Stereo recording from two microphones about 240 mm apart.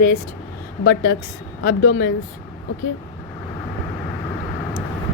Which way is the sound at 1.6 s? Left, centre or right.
Left.